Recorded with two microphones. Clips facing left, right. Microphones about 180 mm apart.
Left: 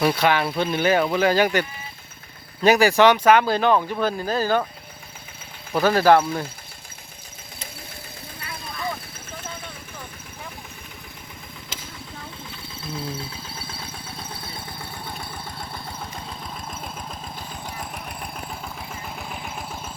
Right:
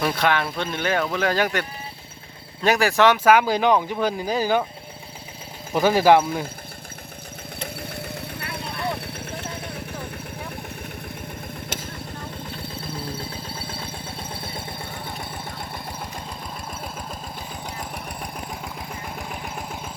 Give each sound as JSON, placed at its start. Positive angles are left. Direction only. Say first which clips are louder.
{"t": 0.0, "sound": "speech", "louder": "left 2 dB", "side_deg": 0}
{"t": 2.6, "sound": "speech", "louder": "left 3 dB", "side_deg": 0}
{"t": 5.7, "sound": "speech", "louder": "even", "side_deg": -15}
{"t": 7.6, "sound": "vehicle", "louder": "right 8 dB", "side_deg": -65}
{"t": 13.1, "sound": "a sound", "louder": "right 2 dB", "side_deg": -30}
{"t": 17.7, "sound": "engine", "louder": "right 1 dB", "side_deg": -15}